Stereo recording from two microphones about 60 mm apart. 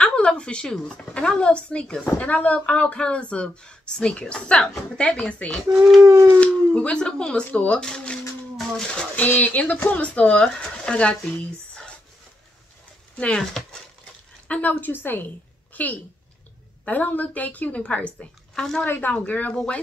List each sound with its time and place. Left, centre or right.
0.0 s speech: centre
9.1 s speech: left
13.1 s speech: centre
13.4 s speech: centre
14.5 s a woman's voice: left
18.5 s speech: centre
18.9 s speech: left